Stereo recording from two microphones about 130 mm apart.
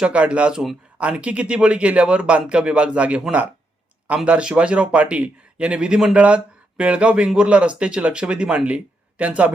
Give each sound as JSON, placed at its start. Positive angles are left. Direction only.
{"t": 0.0, "sound": "a man's voice", "side_deg": -10}